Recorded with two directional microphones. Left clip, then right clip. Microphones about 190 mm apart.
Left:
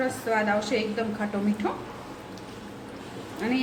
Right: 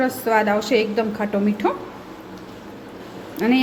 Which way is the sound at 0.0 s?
50° right (ahead or behind).